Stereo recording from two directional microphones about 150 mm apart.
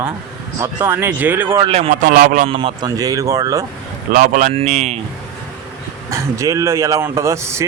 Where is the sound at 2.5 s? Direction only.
35° right (ahead or behind).